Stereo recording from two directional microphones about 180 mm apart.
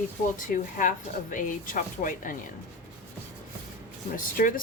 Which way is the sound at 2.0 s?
50° left (ahead or behind).